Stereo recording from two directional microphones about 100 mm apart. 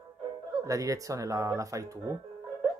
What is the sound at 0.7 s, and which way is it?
Speech, 35° right (ahead or behind).